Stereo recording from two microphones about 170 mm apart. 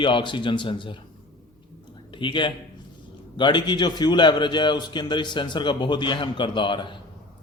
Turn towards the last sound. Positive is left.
turn(degrees=30)  # may be behind; listen again after turning